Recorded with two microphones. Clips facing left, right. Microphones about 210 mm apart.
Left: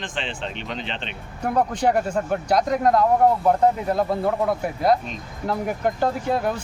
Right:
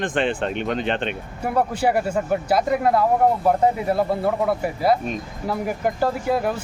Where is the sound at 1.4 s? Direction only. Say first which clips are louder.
Even; 5° right (ahead or behind).